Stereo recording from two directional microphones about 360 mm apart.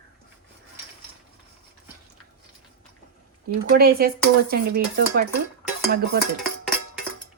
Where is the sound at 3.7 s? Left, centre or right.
Right.